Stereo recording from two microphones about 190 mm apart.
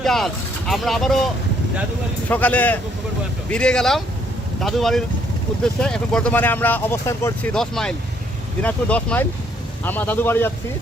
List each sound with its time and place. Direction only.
0.0 s vehicle: centre (ahead or behind)
0.7 s speech: centre (ahead or behind)
2.3 s speech: 10° left (ahead or behind)
7.5 s speech: centre (ahead or behind)